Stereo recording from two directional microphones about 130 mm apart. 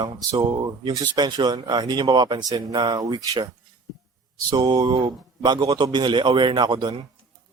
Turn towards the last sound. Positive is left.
turn(degrees=-35)  # may be behind; listen again after turning